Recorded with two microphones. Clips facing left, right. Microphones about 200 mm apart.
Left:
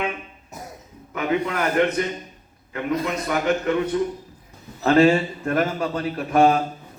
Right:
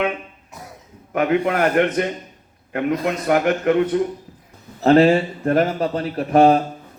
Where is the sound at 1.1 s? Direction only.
55° right (ahead or behind).